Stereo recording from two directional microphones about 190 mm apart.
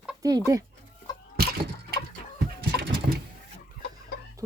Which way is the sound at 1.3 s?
55° right (ahead or behind).